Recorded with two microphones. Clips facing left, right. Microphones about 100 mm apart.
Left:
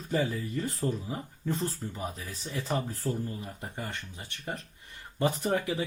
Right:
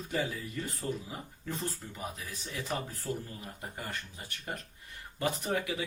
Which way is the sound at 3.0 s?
40° left (ahead or behind).